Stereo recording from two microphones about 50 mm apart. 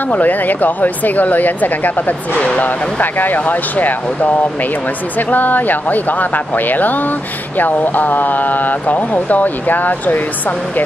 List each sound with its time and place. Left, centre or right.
0.1 s speech: left